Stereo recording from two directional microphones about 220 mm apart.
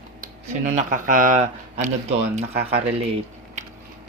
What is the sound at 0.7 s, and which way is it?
Speech, 35° right (ahead or behind).